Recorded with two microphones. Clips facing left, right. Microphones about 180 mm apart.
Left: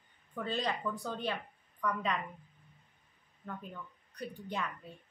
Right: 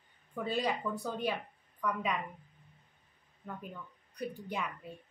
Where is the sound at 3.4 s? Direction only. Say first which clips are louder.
Even; 15° right (ahead or behind).